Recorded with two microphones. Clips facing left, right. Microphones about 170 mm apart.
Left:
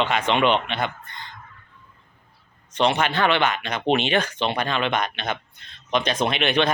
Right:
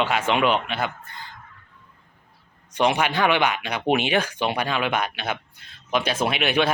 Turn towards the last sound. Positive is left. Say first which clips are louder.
# even
turn(degrees=-10)  # may be behind; listen again after turning